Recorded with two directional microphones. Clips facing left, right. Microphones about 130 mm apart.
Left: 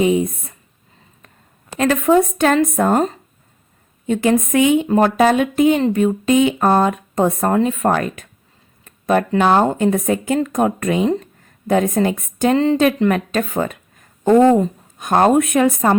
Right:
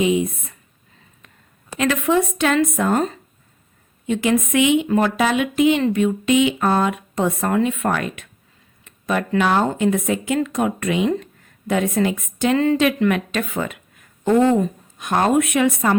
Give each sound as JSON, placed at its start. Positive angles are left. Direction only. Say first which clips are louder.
{"t": 0.0, "sound": "speech", "louder": "left 3 dB", "side_deg": 40}
{"t": 1.8, "sound": "a woman's voice", "louder": "left 4 dB", "side_deg": 40}
{"t": 8.8, "sound": "a sound", "louder": "left 6 dB", "side_deg": 45}
{"t": 9.3, "sound": "a woman's voice", "louder": "left 2 dB", "side_deg": 35}
{"t": 12.5, "sound": "speech", "louder": "left 2 dB", "side_deg": 30}